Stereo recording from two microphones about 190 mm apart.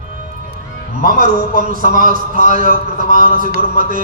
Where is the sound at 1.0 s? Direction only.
45° right (ahead or behind).